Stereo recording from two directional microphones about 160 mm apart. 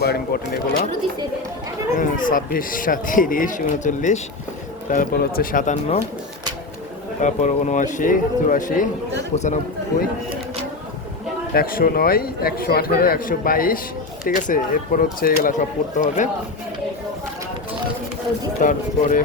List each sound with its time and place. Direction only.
0.0 s speech: 80° left
2.0 s speech: 60° left (ahead or behind)
4.9 s speech: 65° left (ahead or behind); by 6.0 s 50° left (ahead or behind)
7.2 s speech: 50° left (ahead or behind)
9.9 s speech: 65° left (ahead or behind)
11.5 s a man's voice: 65° left (ahead or behind)
18.6 s speech: 55° left (ahead or behind)